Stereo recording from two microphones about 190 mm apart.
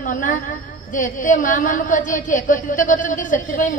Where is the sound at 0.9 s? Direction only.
45° left (ahead or behind).